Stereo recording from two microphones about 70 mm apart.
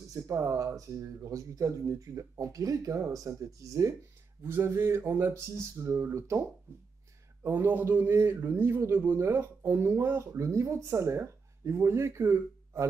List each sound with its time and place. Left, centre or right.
0.1 s speech: right
4.4 s a man's voice: right
7.4 s a man's voice: right